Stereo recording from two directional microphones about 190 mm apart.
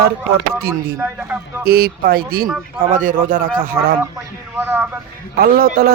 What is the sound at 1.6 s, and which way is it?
Speech, 55° right (ahead or behind).